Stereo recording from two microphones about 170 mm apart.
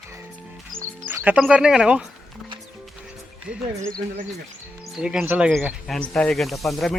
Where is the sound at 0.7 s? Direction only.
55° right (ahead or behind).